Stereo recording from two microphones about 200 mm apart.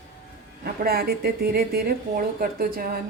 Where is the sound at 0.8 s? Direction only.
50° right (ahead or behind).